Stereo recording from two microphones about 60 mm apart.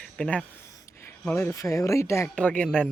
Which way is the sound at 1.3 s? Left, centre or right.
Left.